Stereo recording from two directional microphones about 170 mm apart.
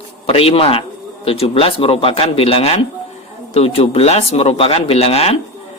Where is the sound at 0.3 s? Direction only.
35° left (ahead or behind).